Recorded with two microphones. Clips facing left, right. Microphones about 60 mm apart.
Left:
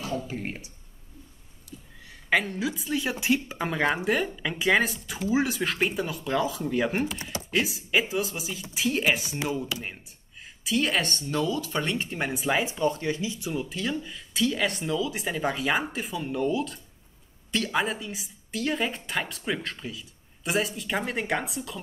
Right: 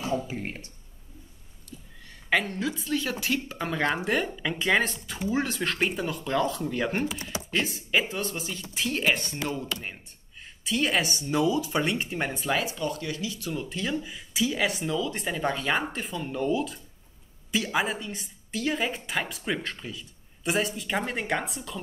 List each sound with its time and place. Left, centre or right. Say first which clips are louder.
0.0 s speech: right 3 dB; right
0.3 s speech: left 1 dB; centre
1.7 s a woman's voice: left 1 dB; centre
12.5 s speech: left 3 dB; left
13.5 s speech: even; centre